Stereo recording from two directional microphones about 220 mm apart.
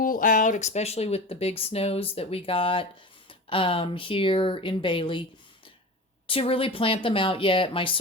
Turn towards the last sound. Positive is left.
turn(degrees=25)  # may be behind; listen again after turning